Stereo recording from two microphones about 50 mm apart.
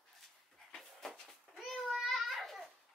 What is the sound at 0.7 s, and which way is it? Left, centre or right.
Dog, centre.